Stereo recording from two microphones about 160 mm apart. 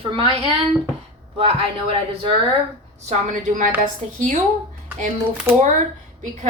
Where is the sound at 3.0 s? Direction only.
50° right (ahead or behind).